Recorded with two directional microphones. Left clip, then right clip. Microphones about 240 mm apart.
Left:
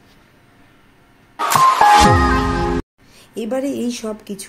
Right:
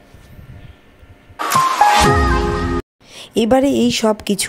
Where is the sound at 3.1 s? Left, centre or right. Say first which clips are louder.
Right 12 dB; right.